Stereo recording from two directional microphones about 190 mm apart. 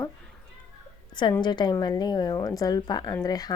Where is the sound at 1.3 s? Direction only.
25° left (ahead or behind).